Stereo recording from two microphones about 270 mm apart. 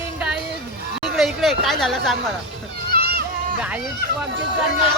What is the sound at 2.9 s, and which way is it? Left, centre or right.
Children playing, right.